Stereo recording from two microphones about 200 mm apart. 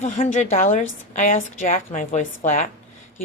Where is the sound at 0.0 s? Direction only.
35° left (ahead or behind).